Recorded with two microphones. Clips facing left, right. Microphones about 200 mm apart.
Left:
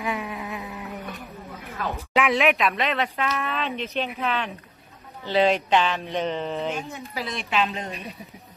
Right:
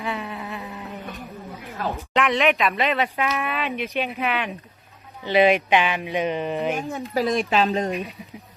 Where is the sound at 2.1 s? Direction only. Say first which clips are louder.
Even; 5° left (ahead or behind).